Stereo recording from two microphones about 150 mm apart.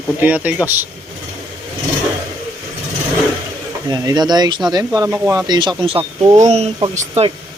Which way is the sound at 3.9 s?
25° right (ahead or behind).